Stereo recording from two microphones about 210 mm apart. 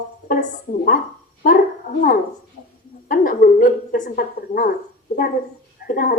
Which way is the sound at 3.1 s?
40° left (ahead or behind).